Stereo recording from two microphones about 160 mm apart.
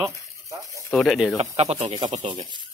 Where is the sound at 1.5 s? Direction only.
45° right (ahead or behind).